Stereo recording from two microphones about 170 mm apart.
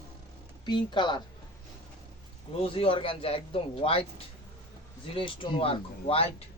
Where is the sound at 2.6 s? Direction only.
35° left (ahead or behind).